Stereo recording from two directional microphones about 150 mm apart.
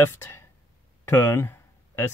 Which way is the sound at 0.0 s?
15° left (ahead or behind).